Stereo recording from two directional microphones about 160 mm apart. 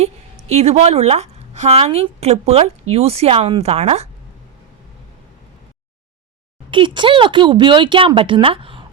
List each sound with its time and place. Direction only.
0.4 s speech: 40° right (ahead or behind)
6.7 s speech: 30° right (ahead or behind)